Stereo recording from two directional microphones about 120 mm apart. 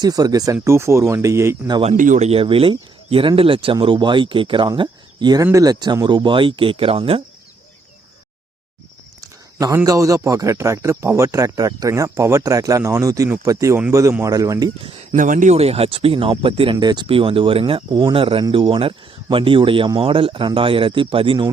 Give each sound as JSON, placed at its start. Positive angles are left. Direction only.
{"t": 0.0, "sound": "speech", "side_deg": -30}
{"t": 1.8, "sound": "speech", "side_deg": -75}
{"t": 2.4, "sound": "speech", "side_deg": -50}
{"t": 9.2, "sound": "a sound", "side_deg": -30}
{"t": 10.2, "sound": "speech", "side_deg": -25}
{"t": 15.1, "sound": "speech", "side_deg": -90}